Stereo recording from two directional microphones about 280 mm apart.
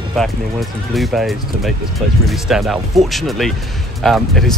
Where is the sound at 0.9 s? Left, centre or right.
Centre.